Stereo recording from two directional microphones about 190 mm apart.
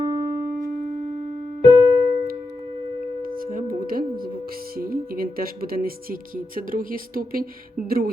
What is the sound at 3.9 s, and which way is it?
Music, 50° right (ahead or behind).